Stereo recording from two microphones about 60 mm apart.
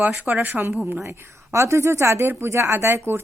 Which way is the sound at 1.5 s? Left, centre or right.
Right.